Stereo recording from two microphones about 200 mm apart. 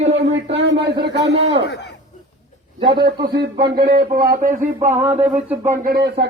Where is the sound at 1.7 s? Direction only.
60° left (ahead or behind).